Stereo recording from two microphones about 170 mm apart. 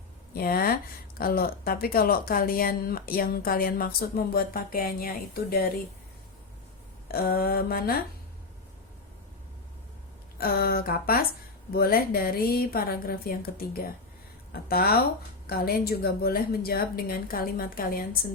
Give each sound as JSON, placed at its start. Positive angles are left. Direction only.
{"t": 0.3, "sound": "speech", "side_deg": 60}
{"t": 7.1, "sound": "speech", "side_deg": 60}
{"t": 10.3, "sound": "speech", "side_deg": 60}